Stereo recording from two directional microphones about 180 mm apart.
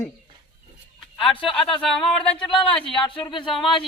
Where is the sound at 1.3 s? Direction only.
30° left (ahead or behind).